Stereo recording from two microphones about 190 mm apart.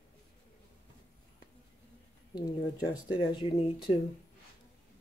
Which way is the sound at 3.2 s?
30° left (ahead or behind).